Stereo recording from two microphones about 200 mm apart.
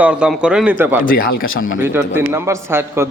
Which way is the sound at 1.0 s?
45° left (ahead or behind).